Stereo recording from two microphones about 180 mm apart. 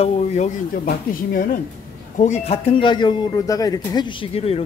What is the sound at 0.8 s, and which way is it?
Speech, 55° left (ahead or behind).